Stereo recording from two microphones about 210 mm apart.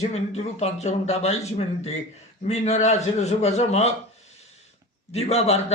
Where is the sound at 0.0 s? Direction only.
30° left (ahead or behind).